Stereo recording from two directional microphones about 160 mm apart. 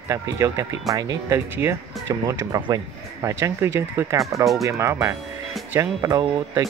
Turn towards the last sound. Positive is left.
turn(degrees=-20)  # may be behind; listen again after turning